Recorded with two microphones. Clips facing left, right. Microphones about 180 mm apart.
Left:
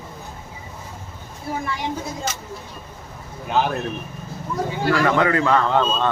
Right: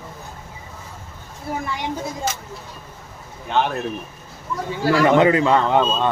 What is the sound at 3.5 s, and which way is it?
Speech, centre (ahead or behind).